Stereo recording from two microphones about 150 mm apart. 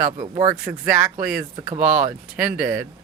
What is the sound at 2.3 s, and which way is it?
Speech, 5° right (ahead or behind).